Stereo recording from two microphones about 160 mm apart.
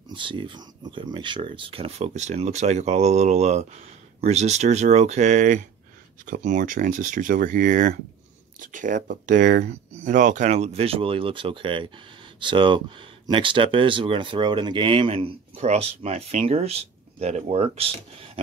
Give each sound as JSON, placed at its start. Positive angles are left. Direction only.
{"t": 0.1, "sound": "speech", "side_deg": -30}